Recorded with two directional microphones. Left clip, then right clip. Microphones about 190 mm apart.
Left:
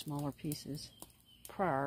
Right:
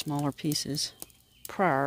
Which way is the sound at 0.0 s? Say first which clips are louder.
Right 10 dB; 60° right (ahead or behind).